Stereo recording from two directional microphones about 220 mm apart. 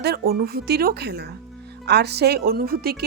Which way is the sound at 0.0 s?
45° right (ahead or behind).